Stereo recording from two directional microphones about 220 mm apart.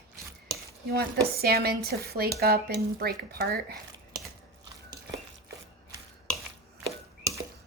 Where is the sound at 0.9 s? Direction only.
45° right (ahead or behind).